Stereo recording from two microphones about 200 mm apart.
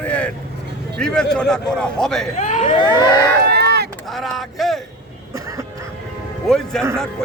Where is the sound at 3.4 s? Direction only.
55° right (ahead or behind).